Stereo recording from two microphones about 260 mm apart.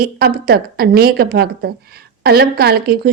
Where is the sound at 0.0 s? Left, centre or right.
Right.